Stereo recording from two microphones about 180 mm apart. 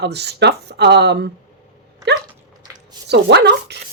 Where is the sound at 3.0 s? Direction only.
70° right (ahead or behind).